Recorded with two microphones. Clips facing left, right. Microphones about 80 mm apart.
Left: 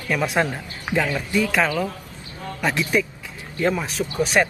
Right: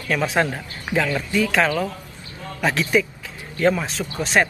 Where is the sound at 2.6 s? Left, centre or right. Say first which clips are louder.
Right 2 dB; centre.